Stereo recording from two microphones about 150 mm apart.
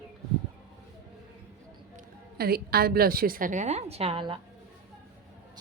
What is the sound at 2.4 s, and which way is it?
A woman's voice, 90° right.